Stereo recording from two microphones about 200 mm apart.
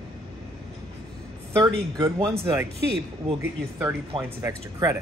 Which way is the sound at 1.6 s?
15° right (ahead or behind).